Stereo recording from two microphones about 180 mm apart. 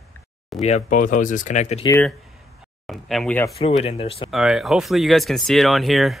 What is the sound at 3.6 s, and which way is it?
Speech, 35° left (ahead or behind).